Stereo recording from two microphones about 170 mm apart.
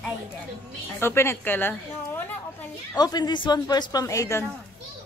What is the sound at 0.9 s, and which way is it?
Speech, 15° left (ahead or behind).